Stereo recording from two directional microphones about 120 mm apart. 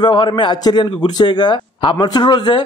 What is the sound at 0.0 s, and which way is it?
A man's voice, 35° left (ahead or behind).